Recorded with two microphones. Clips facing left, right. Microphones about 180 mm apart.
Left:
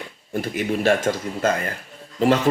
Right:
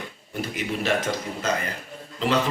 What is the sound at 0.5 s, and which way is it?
Speech, 45° left (ahead or behind).